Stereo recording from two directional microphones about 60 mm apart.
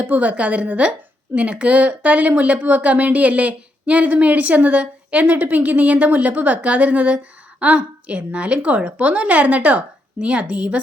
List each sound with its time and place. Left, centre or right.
0.0 s speech: right